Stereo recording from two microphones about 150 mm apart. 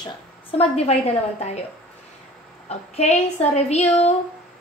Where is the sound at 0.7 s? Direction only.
45° left (ahead or behind).